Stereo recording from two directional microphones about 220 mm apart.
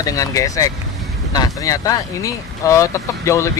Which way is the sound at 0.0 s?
15° left (ahead or behind).